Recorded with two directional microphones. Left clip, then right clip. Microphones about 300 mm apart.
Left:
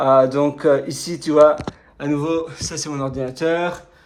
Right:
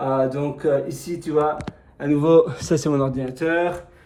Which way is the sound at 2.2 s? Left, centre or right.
Centre.